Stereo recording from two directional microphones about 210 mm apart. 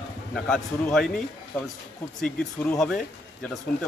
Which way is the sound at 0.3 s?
Centre (ahead or behind).